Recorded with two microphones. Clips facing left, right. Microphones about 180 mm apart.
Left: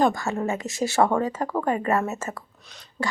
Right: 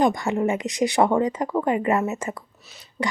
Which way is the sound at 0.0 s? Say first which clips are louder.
Right 2 dB; 15° right (ahead or behind).